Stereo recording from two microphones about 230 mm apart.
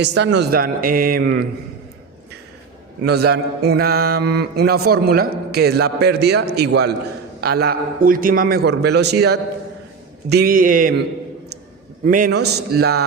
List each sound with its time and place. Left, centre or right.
0.0 s speech: right
3.0 s mantra: right
10.2 s speech: right
12.0 s mantra: right